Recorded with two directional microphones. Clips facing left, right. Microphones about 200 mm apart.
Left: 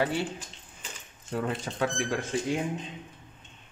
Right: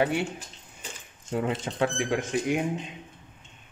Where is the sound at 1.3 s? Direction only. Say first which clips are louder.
Right 3 dB; 20° right (ahead or behind).